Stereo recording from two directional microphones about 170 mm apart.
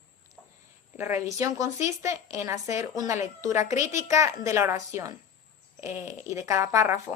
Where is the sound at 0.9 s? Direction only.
15° right (ahead or behind).